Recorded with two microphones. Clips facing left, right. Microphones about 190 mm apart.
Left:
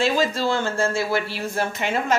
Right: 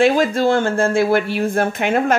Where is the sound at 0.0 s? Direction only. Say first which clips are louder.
Right 7 dB; 55° right (ahead or behind).